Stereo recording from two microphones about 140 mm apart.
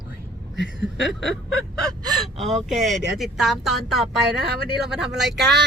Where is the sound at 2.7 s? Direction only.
Centre (ahead or behind).